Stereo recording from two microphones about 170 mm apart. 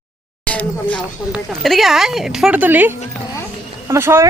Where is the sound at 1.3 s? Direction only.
Centre (ahead or behind).